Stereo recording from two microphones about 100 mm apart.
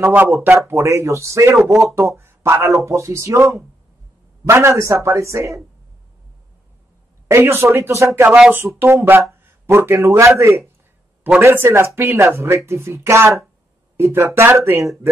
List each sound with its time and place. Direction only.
0.0 s speech: 20° right (ahead or behind)
1.7 s speech: centre (ahead or behind)
2.1 s speech: 25° right (ahead or behind)
7.2 s speech: 25° right (ahead or behind)
8.3 s speech: 15° right (ahead or behind)
8.6 s speech: 25° right (ahead or behind)